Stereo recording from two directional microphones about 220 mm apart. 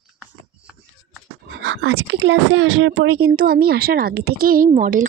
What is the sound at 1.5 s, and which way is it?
Speech, 50° right (ahead or behind).